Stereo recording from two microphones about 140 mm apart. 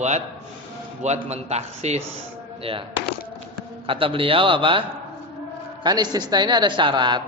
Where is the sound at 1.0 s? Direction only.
50° right (ahead or behind).